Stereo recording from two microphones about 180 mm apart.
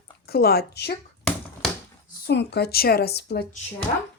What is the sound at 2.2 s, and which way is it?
Speech, 65° left (ahead or behind).